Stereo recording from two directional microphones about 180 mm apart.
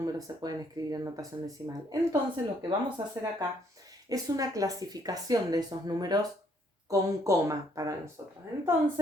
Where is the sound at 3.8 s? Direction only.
20° right (ahead or behind).